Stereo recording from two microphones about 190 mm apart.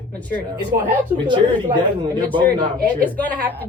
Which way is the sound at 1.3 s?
25° right (ahead or behind).